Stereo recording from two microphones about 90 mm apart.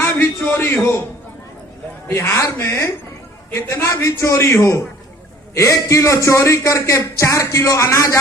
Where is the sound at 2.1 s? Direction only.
30° left (ahead or behind).